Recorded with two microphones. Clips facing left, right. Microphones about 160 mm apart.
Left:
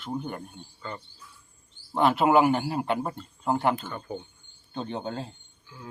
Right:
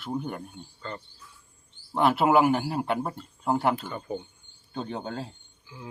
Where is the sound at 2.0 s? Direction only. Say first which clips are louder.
Even; 5° right (ahead or behind).